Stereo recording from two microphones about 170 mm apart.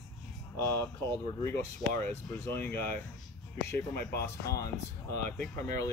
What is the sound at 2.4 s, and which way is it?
Speech, 10° left (ahead or behind).